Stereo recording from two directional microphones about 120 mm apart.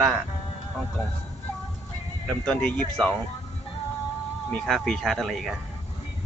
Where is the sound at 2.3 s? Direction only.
10° left (ahead or behind).